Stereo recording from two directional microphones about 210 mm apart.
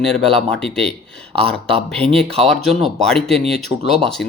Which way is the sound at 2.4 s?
Centre (ahead or behind).